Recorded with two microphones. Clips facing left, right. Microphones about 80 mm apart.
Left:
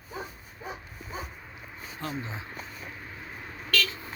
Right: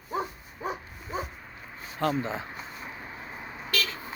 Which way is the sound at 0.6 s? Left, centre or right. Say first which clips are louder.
Right 6 dB; right.